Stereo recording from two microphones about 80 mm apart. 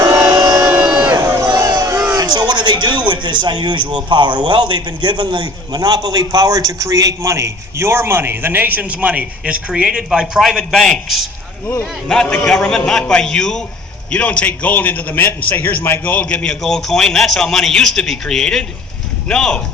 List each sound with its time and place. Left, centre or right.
0.6 s crowd: centre
1.1 s crowd: right
2.1 s a man's voice: right; by 19.6 s centre